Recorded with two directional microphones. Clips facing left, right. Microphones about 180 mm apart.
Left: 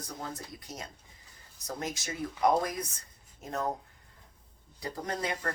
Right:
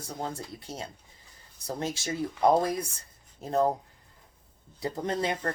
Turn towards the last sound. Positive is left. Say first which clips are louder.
# right 5 dB
turn(degrees=-25)  # may be behind; listen again after turning